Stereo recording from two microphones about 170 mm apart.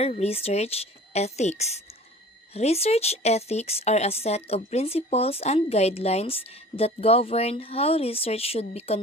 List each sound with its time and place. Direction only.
0.0 s speech: 35° left (ahead or behind)